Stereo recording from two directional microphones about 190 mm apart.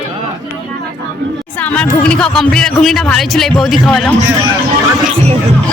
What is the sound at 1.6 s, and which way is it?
Speech, 5° left (ahead or behind).